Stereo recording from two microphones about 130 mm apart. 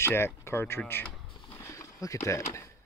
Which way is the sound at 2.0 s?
25° left (ahead or behind).